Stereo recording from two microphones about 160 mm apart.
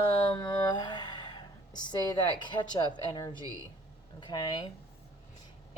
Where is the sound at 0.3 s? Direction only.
25° left (ahead or behind).